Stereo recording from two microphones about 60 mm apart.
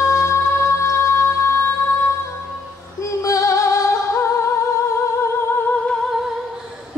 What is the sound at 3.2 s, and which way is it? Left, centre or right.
Music, left.